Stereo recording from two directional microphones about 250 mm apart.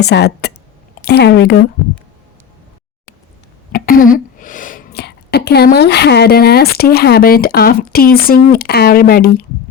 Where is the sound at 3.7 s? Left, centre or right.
Left.